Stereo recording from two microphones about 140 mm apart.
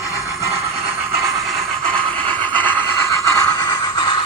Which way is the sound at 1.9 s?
10° left (ahead or behind).